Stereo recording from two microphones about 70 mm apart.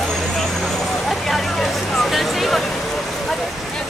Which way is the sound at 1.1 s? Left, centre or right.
Centre.